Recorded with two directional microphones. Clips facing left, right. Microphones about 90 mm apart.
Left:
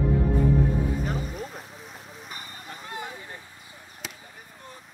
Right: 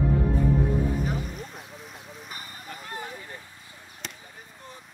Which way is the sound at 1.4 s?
Centre (ahead or behind).